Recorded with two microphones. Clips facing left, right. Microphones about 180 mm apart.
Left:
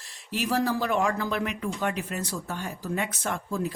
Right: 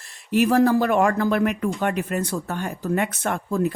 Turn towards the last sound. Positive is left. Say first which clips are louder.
# right 6 dB
turn(degrees=-60)  # may be behind; listen again after turning